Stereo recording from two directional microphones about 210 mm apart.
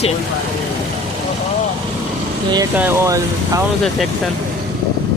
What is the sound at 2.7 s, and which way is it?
Speech, 10° right (ahead or behind).